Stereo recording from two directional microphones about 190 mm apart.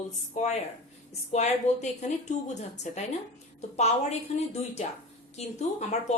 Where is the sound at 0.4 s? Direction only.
40° left (ahead or behind).